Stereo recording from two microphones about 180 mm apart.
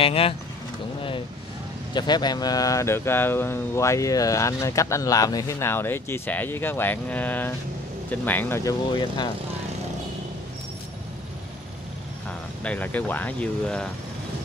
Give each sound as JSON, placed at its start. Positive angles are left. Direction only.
{"t": 0.0, "sound": "speech", "side_deg": 30}
{"t": 2.0, "sound": "speech", "side_deg": 25}
{"t": 12.3, "sound": "speech", "side_deg": 5}